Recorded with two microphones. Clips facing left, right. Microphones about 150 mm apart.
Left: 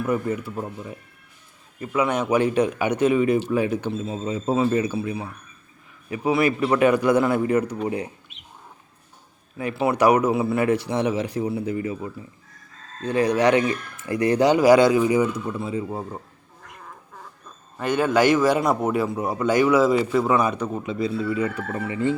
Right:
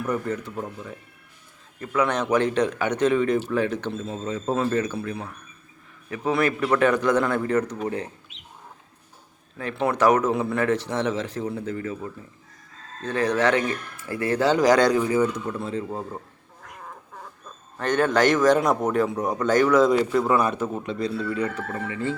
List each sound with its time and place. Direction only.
0.0 s a man's voice: 10° left (ahead or behind)
9.6 s a man's voice: 10° left (ahead or behind)
17.7 s a man's voice: 10° left (ahead or behind)